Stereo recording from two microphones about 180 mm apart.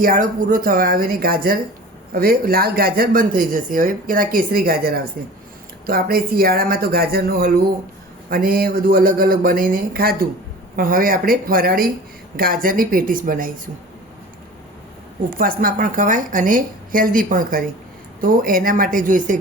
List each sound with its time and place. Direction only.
0.0 s speech: 50° right (ahead or behind)
15.3 s speech: 55° right (ahead or behind)